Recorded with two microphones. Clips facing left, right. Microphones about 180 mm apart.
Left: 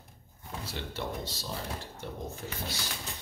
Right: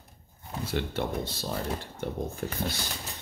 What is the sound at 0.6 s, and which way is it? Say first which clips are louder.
Speech: right 7 dB; 55° right (ahead or behind).